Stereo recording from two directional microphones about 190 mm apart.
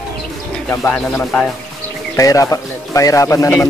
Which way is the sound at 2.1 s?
15° left (ahead or behind).